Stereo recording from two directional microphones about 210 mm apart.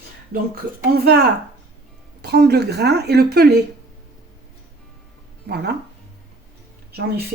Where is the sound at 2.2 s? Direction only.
50° right (ahead or behind).